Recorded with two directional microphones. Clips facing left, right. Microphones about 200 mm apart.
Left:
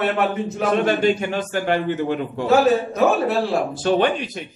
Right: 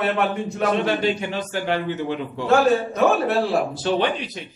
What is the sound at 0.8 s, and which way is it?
A man's voice, 50° left (ahead or behind).